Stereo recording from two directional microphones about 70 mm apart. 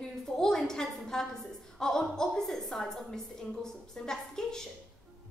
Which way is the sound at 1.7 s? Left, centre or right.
Centre.